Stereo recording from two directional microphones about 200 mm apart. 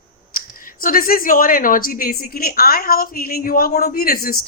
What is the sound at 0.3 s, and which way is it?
Speech, 45° left (ahead or behind).